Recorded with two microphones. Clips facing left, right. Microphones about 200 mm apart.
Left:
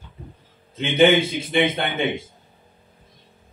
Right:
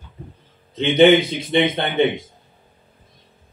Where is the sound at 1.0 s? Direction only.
35° right (ahead or behind).